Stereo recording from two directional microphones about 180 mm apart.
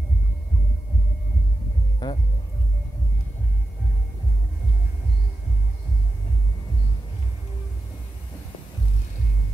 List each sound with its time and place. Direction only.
2.0 s speech: 20° left (ahead or behind)